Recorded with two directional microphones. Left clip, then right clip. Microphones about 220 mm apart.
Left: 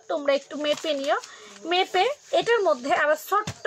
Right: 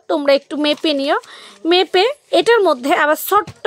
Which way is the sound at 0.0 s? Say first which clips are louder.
Right 9 dB; 55° right (ahead or behind).